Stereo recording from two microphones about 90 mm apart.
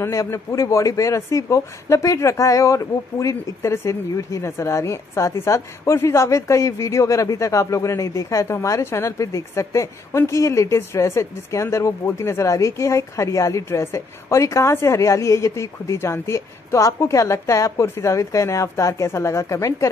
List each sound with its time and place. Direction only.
0.0 s speech: 35° left (ahead or behind)